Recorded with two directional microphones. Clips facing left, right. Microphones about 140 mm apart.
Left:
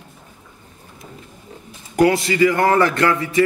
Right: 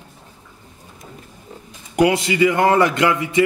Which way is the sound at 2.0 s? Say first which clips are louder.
Left 1 dB; 20° right (ahead or behind).